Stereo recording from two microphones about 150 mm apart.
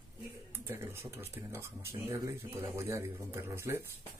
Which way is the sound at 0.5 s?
15° right (ahead or behind).